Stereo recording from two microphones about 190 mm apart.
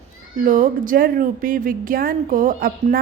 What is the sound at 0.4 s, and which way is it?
A woman's voice, 45° right (ahead or behind).